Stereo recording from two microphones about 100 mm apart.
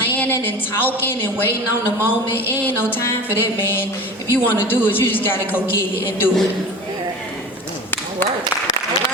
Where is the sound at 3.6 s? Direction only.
20° left (ahead or behind).